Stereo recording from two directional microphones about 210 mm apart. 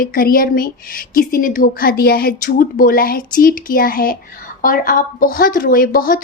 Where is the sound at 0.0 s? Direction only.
40° left (ahead or behind).